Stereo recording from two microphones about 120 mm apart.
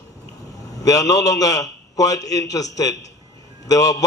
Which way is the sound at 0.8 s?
30° left (ahead or behind).